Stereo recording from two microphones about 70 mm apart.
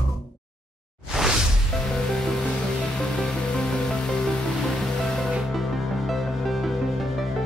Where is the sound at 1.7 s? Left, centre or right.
Centre.